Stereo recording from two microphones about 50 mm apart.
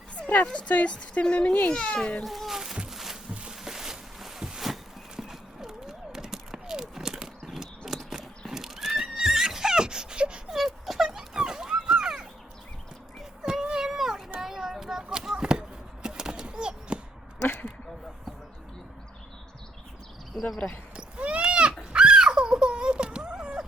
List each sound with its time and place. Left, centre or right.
0.2 s dog: left
0.4 s speech: left
2.2 s a child's voice: centre
2.9 s music: centre
3.5 s a sound: centre
5.1 s clip-clop: centre
10.5 s a sound: centre
13.4 s cat: centre
14.3 s a sound: centre
20.4 s cricket: centre
20.9 s horse: right
21.8 s a sound: centre